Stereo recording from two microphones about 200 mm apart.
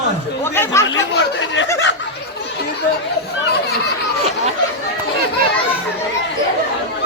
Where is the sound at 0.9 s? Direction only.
70° left (ahead or behind).